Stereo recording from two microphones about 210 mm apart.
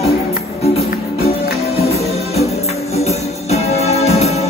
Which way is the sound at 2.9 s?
30° left (ahead or behind).